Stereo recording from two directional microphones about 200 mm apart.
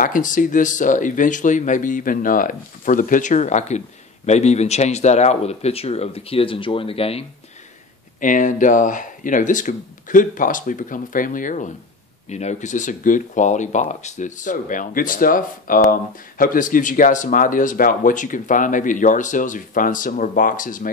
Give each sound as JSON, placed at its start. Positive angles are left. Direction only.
{"t": 0.0, "sound": "speech", "side_deg": 40}
{"t": 8.2, "sound": "speech", "side_deg": 40}